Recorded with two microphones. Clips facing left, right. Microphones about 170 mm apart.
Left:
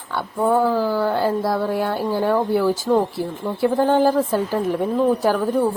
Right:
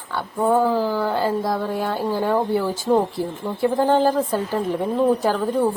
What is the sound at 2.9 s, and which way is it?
Speech, 15° right (ahead or behind).